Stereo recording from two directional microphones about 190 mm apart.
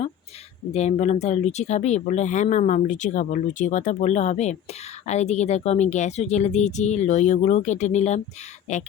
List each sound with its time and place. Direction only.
0.7 s speech: 35° left (ahead or behind)